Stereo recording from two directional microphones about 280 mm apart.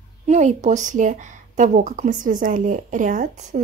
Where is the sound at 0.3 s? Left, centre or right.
Right.